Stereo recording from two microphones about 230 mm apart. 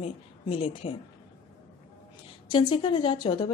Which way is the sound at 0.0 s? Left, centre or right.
Left.